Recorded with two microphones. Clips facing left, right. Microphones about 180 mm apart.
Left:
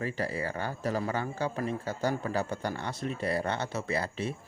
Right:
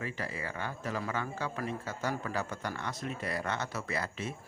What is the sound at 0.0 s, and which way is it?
Speech, 35° left (ahead or behind).